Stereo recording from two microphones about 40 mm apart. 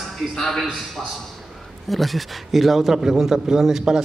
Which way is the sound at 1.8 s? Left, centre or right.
Centre.